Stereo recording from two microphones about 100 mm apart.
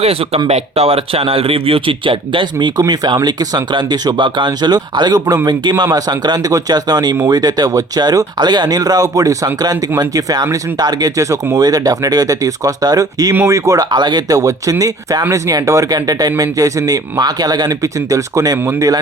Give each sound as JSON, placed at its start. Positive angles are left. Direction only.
{"t": 0.4, "sound": "speech", "side_deg": -90}